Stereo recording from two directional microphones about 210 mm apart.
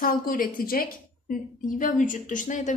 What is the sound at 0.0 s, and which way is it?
A woman's voice, 40° left (ahead or behind).